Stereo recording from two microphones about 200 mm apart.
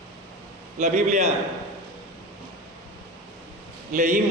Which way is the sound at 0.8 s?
35° right (ahead or behind).